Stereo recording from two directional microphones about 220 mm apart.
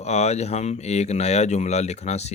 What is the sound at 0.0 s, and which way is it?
Speech, 30° left (ahead or behind).